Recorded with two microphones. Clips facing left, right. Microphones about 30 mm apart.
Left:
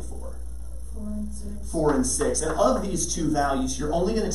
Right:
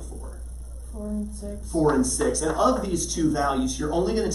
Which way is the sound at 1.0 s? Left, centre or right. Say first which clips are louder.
Right 2 dB; right.